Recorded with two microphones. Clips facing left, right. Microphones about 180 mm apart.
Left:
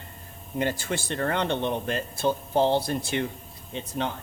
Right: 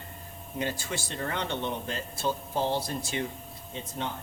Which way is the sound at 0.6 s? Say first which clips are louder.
Left 5 dB; 55° left (ahead or behind).